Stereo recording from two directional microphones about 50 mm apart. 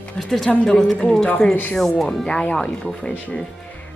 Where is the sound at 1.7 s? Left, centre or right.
Centre.